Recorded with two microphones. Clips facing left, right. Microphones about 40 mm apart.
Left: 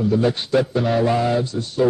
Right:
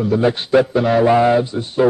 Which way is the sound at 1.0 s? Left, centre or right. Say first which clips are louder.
Right 6 dB; right.